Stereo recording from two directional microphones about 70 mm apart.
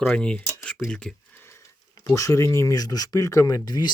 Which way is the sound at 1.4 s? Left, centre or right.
Left.